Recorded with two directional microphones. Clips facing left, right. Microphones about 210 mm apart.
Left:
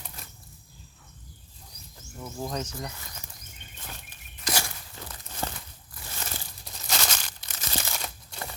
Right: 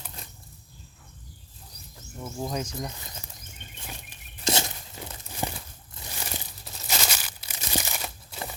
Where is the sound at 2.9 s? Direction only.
20° right (ahead or behind).